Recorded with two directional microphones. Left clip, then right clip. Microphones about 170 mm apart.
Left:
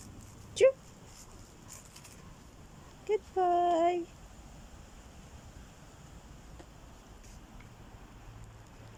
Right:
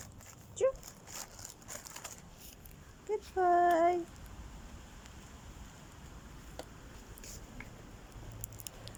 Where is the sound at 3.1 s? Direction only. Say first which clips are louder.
Left 1 dB; 10° left (ahead or behind).